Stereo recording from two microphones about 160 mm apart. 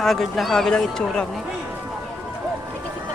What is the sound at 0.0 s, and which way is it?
Speech, centre (ahead or behind).